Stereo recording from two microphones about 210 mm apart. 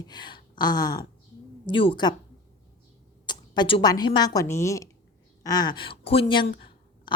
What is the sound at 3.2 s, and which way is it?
Speech, 20° left (ahead or behind).